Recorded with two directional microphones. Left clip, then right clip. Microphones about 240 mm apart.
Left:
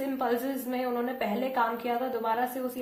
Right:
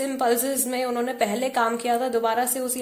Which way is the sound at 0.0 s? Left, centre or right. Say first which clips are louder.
Right 6 dB; right.